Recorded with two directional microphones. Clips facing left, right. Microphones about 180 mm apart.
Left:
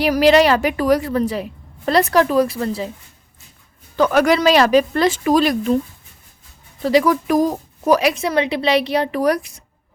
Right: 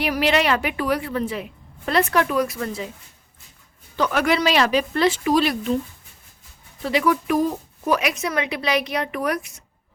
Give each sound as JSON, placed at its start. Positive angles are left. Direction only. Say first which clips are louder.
{"t": 0.0, "sound": "a woman's voice", "louder": "left 7 dB", "side_deg": 40}
{"t": 3.9, "sound": "a woman's voice", "louder": "left 6 dB", "side_deg": 45}
{"t": 6.8, "sound": "a woman's voice", "louder": "left 5 dB", "side_deg": 40}